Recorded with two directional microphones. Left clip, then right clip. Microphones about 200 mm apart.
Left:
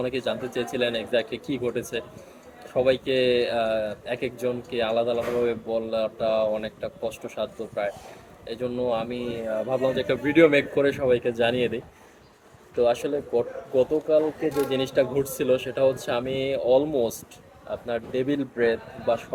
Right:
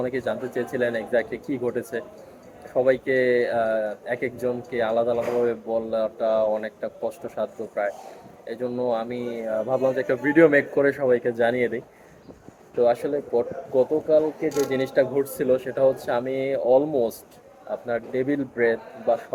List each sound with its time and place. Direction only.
0.0 s a man's voice: 10° left (ahead or behind)
12.8 s a man's voice: 10° left (ahead or behind)
16.2 s speech: 15° right (ahead or behind)
16.5 s a man's voice: 10° left (ahead or behind)